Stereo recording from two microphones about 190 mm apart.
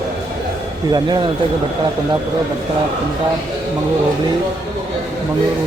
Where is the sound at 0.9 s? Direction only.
25° right (ahead or behind).